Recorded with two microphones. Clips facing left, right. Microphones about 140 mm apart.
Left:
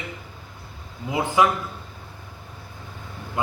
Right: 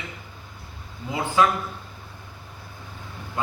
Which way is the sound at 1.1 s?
15° left (ahead or behind).